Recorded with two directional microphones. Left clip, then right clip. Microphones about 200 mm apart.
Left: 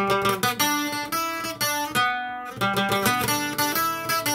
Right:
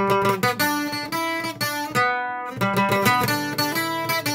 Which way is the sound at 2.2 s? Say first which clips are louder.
Right 2 dB; 35° right (ahead or behind).